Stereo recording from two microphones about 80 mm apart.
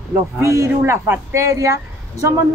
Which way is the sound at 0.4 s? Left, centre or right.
Right.